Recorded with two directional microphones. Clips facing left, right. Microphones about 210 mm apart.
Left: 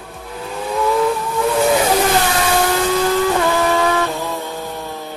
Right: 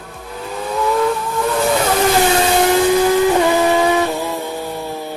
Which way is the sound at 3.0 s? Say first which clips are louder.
Right 3 dB; 15° right (ahead or behind).